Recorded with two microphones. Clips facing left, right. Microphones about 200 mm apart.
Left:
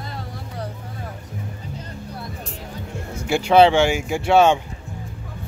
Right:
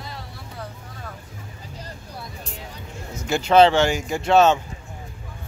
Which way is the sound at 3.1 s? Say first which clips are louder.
Left 1 dB; 10° left (ahead or behind).